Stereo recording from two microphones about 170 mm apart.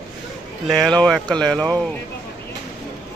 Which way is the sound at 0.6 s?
Centre (ahead or behind).